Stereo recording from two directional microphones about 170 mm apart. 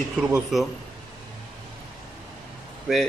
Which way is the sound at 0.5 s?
Centre (ahead or behind).